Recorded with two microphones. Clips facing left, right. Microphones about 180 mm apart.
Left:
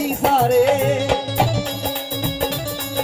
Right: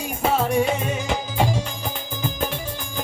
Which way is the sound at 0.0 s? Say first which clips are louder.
Left 5 dB; 75° left (ahead or behind).